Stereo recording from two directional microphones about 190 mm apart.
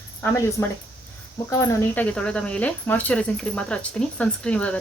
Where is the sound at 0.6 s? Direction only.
15° left (ahead or behind).